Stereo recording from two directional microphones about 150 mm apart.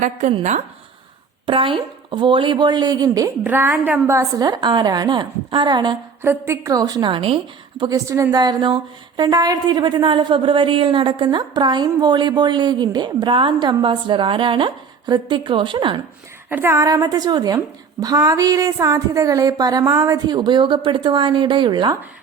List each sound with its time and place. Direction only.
0.0 s a woman's voice: 50° right (ahead or behind)
1.5 s a woman's voice: 35° right (ahead or behind)
3.4 s a woman's voice: 15° right (ahead or behind); by 6.0 s 30° right (ahead or behind)
6.2 s a woman's voice: 15° right (ahead or behind); by 16.0 s 35° right (ahead or behind)
16.5 s a woman's voice: 15° right (ahead or behind)